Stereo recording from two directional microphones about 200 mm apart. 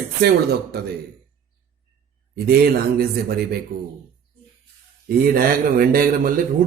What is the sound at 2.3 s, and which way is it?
Speech, 50° right (ahead or behind).